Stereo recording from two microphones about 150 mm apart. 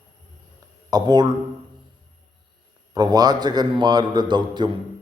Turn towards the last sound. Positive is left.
turn(degrees=-30)  # may be behind; listen again after turning